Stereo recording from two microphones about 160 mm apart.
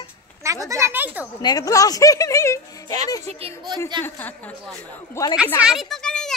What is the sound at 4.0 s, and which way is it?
Speech, 10° left (ahead or behind).